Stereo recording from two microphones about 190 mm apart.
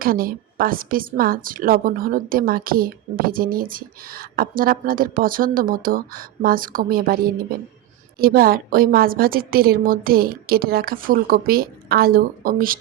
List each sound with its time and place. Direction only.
0.0 s a woman's voice: 50° right (ahead or behind)
8.2 s a woman's voice: 50° right (ahead or behind)